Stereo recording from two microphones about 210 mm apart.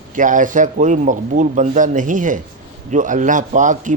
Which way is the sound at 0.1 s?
40° right (ahead or behind).